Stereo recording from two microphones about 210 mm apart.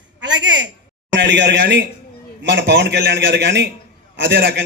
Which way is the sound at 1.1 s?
60° right (ahead or behind).